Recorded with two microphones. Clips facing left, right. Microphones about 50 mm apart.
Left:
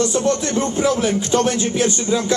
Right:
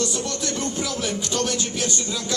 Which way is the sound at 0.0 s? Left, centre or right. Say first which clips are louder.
Left 8 dB; left.